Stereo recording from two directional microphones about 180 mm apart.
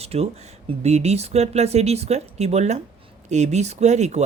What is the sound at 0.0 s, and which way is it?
Speech, 35° right (ahead or behind).